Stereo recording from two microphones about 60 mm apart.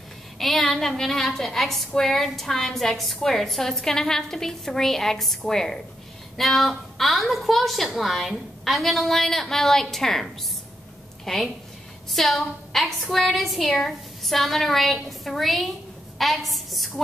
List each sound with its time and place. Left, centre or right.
0.4 s a woman's voice: centre